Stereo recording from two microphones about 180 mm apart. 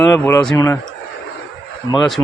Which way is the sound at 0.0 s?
10° left (ahead or behind).